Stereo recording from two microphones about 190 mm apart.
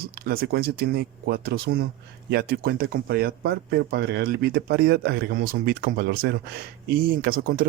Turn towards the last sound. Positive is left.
turn(degrees=-50)  # may be behind; listen again after turning